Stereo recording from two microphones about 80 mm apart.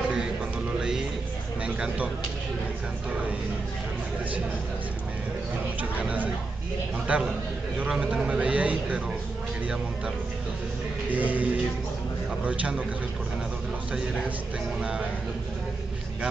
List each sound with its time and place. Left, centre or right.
0.7 s music: centre
5.8 s speech: centre
11.1 s speech: right
12.4 s speech: centre
14.8 s speech: centre